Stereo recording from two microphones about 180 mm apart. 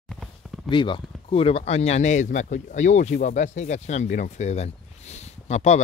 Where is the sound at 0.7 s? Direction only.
25° left (ahead or behind).